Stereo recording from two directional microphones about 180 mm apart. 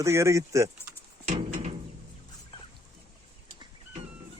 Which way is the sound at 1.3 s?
40° right (ahead or behind).